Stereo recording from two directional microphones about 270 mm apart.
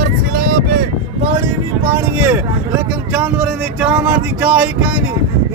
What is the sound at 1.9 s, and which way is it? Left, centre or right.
Speech, centre.